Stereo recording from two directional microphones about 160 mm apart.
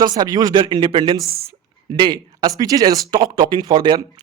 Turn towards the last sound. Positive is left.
turn(degrees=-30)  # may be behind; listen again after turning